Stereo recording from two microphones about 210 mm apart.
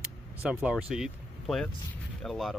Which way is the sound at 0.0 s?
5° right (ahead or behind).